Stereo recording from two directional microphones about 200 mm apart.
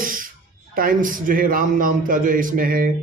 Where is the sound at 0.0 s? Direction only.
45° right (ahead or behind).